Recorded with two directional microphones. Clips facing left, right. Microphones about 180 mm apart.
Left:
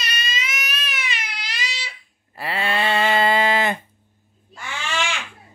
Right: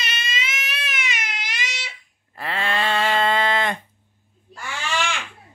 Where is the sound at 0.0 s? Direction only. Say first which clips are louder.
Even; 25° right (ahead or behind).